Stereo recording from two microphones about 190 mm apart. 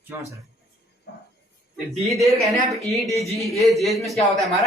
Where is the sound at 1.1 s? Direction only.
60° left (ahead or behind).